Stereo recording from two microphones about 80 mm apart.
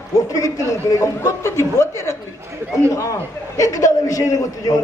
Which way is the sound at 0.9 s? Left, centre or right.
Left.